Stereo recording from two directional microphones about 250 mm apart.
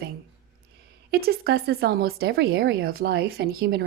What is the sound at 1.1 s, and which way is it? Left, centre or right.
A woman's voice, right.